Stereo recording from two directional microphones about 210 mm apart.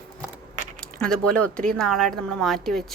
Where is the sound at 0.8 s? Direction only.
5° left (ahead or behind).